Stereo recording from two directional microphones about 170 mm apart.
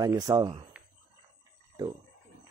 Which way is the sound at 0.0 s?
25° right (ahead or behind).